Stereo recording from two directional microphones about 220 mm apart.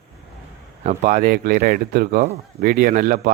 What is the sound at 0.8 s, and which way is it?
Speech, 35° right (ahead or behind).